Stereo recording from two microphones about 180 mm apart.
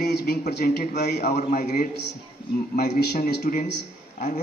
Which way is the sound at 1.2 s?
45° left (ahead or behind).